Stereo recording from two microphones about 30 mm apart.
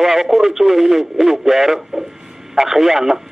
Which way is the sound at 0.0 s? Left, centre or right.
Centre.